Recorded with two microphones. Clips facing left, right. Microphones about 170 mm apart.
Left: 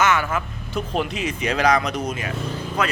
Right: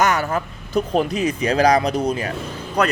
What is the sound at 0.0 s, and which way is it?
Speech, 40° right (ahead or behind).